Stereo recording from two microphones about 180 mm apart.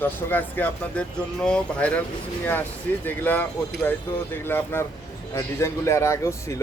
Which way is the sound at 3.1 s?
10° left (ahead or behind).